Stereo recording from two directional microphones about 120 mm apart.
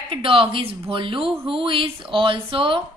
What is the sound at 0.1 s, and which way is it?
A woman's voice, 45° right (ahead or behind).